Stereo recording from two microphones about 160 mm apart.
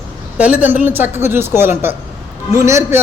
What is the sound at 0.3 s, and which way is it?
A man's voice, 10° right (ahead or behind).